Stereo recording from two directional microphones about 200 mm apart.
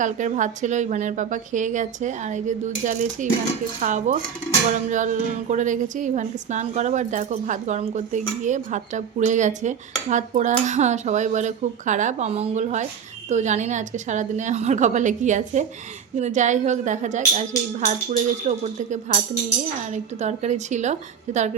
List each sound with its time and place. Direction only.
0.0 s speech: 40° right (ahead or behind)